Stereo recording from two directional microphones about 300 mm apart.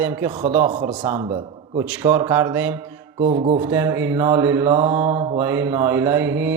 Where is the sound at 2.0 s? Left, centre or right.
Centre.